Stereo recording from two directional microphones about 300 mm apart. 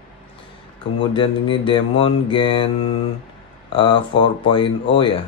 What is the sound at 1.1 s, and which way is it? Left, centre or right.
Speech, centre.